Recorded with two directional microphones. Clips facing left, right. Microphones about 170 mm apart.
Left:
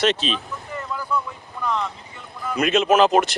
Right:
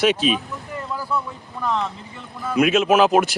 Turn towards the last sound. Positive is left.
turn(degrees=-5)  # may be behind; listen again after turning